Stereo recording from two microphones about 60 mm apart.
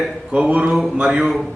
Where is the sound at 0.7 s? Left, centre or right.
Centre.